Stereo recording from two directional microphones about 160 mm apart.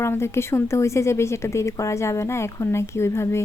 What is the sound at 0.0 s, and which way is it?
A woman's voice, 15° left (ahead or behind).